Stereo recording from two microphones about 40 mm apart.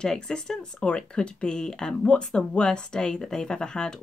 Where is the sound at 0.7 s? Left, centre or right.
Left.